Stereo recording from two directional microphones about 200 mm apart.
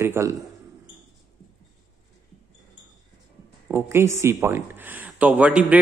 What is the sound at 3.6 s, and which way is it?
A man's voice, 10° right (ahead or behind).